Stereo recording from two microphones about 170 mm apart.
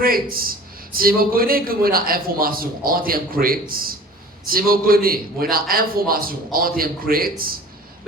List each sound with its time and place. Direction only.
0.0 s a man's voice: 60° right (ahead or behind)